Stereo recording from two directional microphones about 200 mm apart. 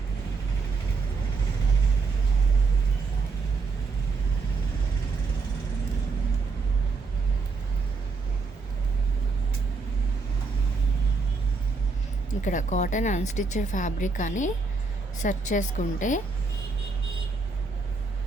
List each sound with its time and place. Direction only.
12.3 s speech: 40° left (ahead or behind)